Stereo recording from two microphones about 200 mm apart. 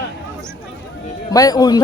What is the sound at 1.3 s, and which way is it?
Speech, 20° left (ahead or behind).